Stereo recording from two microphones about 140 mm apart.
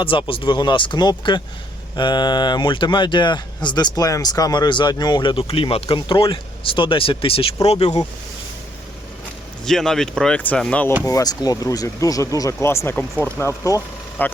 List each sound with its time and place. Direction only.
0.0 s speech: 40° left (ahead or behind)
9.6 s speech: 5° left (ahead or behind)
11.0 s speech: 25° left (ahead or behind)